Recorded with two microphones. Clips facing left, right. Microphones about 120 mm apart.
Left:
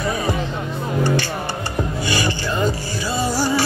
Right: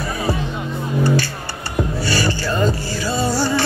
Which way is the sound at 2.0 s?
20° left (ahead or behind).